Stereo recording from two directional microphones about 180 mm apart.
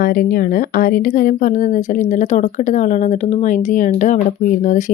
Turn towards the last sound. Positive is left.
turn(degrees=45)  # may be behind; listen again after turning